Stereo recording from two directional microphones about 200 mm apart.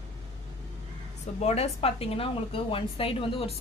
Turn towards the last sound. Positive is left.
turn(degrees=30)  # may be behind; listen again after turning